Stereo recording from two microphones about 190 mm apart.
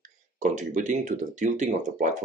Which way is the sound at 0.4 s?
40° right (ahead or behind).